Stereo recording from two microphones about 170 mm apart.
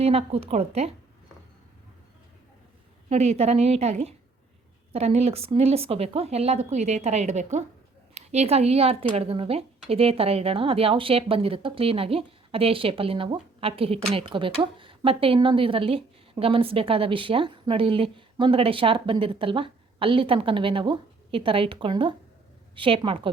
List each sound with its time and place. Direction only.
0.0 s a woman's voice: 35° right (ahead or behind)
3.1 s a woman's voice: 40° right (ahead or behind)